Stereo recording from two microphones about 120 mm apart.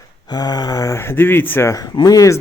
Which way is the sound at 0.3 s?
35° left (ahead or behind).